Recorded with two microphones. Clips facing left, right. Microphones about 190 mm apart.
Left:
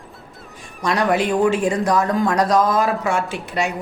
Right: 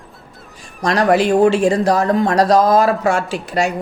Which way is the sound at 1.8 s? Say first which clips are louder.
Right 3 dB; 35° right (ahead or behind).